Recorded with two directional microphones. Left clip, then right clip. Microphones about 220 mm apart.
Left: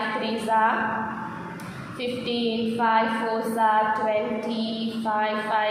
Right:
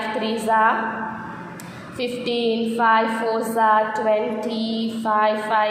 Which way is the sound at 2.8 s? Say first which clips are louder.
Right 4 dB; 35° right (ahead or behind).